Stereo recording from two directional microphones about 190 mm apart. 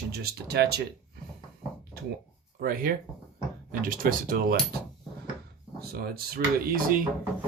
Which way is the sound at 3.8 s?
45° right (ahead or behind).